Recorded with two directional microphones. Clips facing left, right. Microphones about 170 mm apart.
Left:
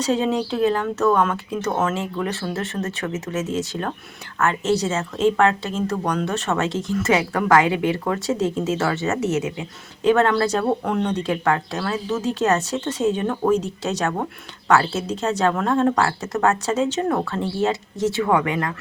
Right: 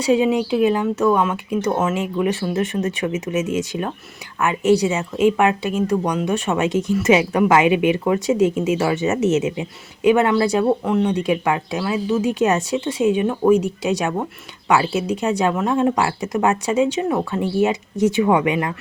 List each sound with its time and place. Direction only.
0.0 s speech: 10° right (ahead or behind)